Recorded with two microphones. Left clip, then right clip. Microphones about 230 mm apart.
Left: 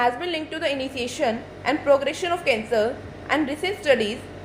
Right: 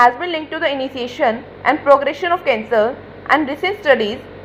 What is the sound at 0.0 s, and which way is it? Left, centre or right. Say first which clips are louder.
A woman's voice: right 9 dB; centre.